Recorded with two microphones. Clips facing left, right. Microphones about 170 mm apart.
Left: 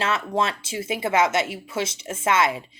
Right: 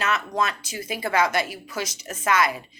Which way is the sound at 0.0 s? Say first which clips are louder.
Left 1 dB; 30° left (ahead or behind).